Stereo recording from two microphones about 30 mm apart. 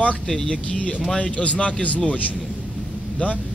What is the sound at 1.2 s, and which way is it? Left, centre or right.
Speech, left.